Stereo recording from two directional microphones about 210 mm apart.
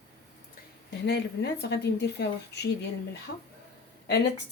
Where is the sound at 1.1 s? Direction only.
50° left (ahead or behind).